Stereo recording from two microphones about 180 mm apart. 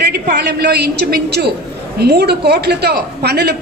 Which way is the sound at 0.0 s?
65° right (ahead or behind).